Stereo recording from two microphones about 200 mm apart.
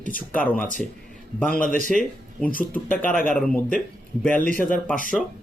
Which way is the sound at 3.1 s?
45° left (ahead or behind).